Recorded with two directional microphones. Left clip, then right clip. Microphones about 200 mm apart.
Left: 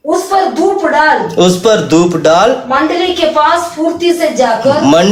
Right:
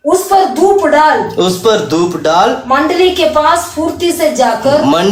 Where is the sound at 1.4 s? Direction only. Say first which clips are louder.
Left 2 dB; 35° left (ahead or behind).